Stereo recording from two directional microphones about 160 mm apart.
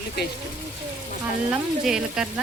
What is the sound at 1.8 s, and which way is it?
Speech, 5° right (ahead or behind).